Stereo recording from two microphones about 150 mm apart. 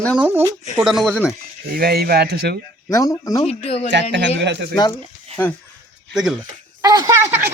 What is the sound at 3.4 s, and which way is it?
Speech, 40° left (ahead or behind).